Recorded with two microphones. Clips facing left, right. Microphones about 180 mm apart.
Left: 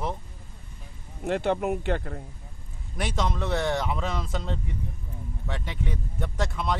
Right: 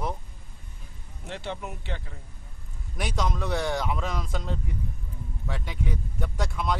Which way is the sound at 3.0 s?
Centre (ahead or behind).